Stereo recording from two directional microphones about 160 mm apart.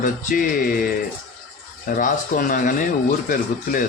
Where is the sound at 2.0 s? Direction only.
55° left (ahead or behind).